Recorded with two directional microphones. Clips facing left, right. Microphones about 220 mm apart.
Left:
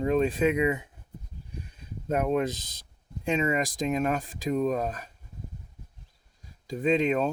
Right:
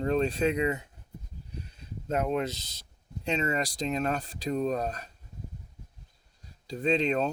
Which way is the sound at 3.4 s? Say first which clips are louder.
Left 3 dB; 15° left (ahead or behind).